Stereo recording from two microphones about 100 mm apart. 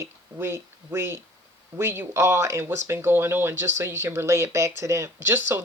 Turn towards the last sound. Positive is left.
turn(degrees=-25)  # may be behind; listen again after turning